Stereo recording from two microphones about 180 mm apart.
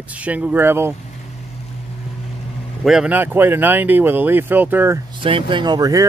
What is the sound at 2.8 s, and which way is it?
Speech, 5° right (ahead or behind).